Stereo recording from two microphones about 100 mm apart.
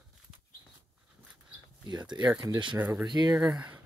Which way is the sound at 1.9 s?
45° right (ahead or behind).